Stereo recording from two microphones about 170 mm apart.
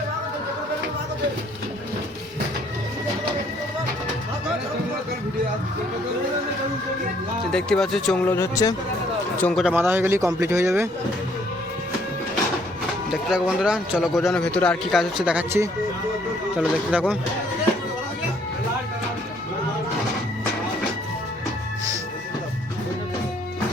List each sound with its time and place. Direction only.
7.5 s speech: 5° left (ahead or behind)
8.3 s speech: 15° left (ahead or behind)
9.4 s speech: 5° left (ahead or behind)
9.7 s speech: 10° right (ahead or behind)
13.1 s speech: 5° right (ahead or behind)